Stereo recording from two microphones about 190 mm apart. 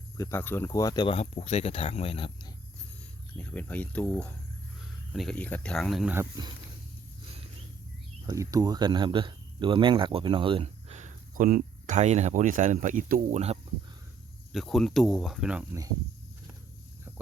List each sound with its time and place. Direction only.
0.2 s speech: 10° left (ahead or behind); by 2.5 s 30° left (ahead or behind)
3.3 s speech: 10° left (ahead or behind)
6.1 s speech: 20° right (ahead or behind)
8.3 s speech: 20° right (ahead or behind); by 13.6 s 35° right (ahead or behind)
14.5 s speech: centre (ahead or behind)